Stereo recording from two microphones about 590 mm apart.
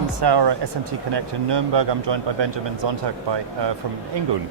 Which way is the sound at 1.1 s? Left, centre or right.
Right.